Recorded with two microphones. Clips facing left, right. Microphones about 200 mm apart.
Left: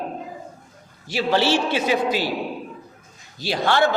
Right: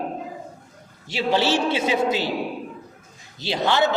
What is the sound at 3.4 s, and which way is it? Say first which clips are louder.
Speech: left 1 dB; 20° right (ahead or behind).